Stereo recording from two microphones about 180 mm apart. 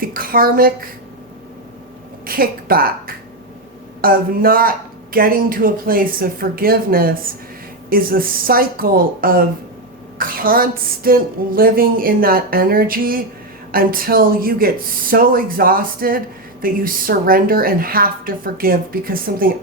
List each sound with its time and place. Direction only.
0.0 s speech: 50° right (ahead or behind)
2.2 s a woman's voice: 55° right (ahead or behind)